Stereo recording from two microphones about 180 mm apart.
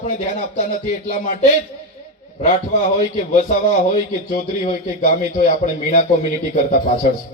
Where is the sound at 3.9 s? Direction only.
45° left (ahead or behind).